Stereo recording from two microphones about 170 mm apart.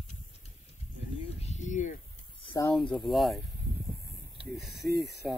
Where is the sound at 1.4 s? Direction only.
45° left (ahead or behind).